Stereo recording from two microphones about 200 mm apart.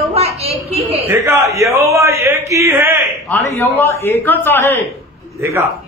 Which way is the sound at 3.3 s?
10° left (ahead or behind).